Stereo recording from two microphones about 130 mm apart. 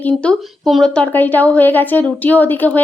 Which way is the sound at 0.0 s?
10° left (ahead or behind).